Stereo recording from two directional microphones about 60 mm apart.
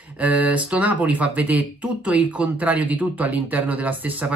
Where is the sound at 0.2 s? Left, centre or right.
Right.